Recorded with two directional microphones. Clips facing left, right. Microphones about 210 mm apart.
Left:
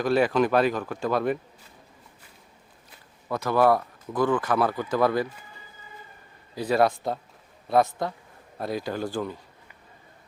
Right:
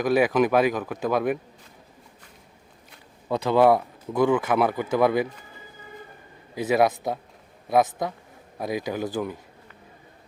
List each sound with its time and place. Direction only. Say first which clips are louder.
0.0 s speech: right 1 dB; 15° right (ahead or behind)
3.2 s speech: right 3 dB; 20° right (ahead or behind)
6.7 s speech: right 1 dB; 15° right (ahead or behind)